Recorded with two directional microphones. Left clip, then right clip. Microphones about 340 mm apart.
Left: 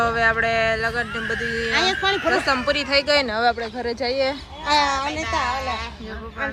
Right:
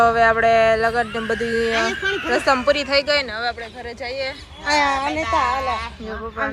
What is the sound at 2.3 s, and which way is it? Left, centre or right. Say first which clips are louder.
Speech: right 3 dB; centre.